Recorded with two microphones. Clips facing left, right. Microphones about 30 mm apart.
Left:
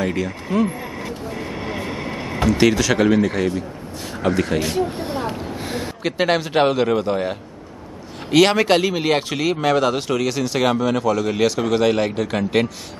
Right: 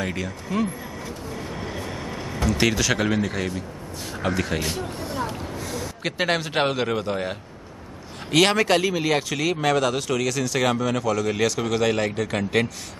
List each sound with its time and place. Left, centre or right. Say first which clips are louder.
0.0 s a man's voice: left 6 dB; centre
0.5 s speech: left 5 dB; left
1.0 s vehicle: left 4 dB; left
2.5 s a man's voice: left 5 dB; centre
4.6 s speech: left 7 dB; left
4.9 s speech: left 4 dB; left
6.0 s a man's voice: left 5 dB; centre
8.7 s speech: left 3 dB; left
10.6 s a man's voice: left 5 dB; centre